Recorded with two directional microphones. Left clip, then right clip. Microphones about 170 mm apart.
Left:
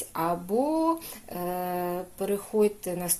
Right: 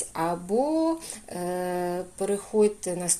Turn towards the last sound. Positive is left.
turn(degrees=0)  # may be behind; listen again after turning